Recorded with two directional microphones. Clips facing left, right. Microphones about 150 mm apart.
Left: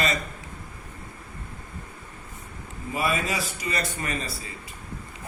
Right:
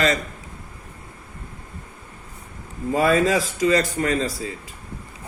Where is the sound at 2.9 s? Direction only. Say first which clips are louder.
Right 9 dB; 90° right.